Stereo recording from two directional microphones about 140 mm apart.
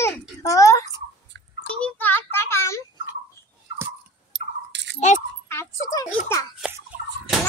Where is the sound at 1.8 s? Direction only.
15° left (ahead or behind).